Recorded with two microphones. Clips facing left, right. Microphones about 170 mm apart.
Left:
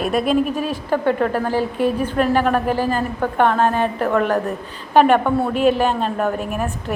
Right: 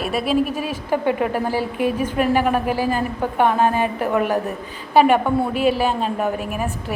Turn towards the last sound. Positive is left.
turn(degrees=-5)  # may be behind; listen again after turning